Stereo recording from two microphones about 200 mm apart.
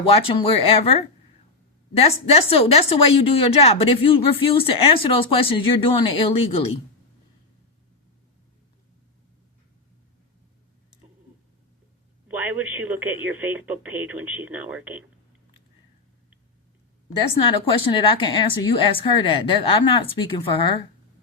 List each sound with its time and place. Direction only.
0.0 s speech: 30° left (ahead or behind)
12.3 s speech: 10° right (ahead or behind)
17.4 s speech: 25° left (ahead or behind)